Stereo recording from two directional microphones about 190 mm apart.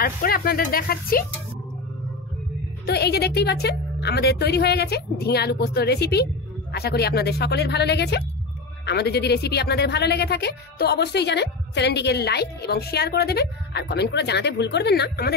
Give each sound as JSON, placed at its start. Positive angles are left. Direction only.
{"t": 0.0, "sound": "speech", "side_deg": 50}
{"t": 2.9, "sound": "speech", "side_deg": 60}